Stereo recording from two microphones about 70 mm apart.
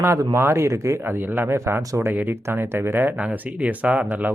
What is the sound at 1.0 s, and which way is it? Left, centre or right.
Speech, right.